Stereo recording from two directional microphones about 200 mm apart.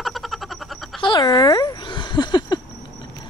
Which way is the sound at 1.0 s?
20° left (ahead or behind).